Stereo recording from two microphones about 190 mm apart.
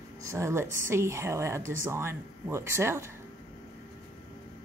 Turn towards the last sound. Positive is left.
turn(degrees=-15)  # may be behind; listen again after turning